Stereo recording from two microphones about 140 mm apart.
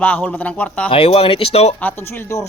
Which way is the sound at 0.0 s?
10° left (ahead or behind).